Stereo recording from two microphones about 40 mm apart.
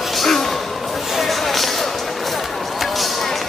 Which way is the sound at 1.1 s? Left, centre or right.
Centre.